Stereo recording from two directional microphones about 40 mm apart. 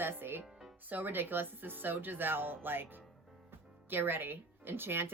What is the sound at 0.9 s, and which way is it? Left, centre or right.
Speech, right.